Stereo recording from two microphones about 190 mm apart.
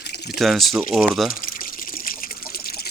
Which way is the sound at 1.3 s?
50° left (ahead or behind).